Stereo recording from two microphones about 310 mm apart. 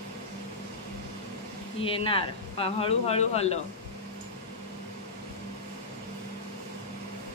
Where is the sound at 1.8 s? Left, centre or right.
Centre.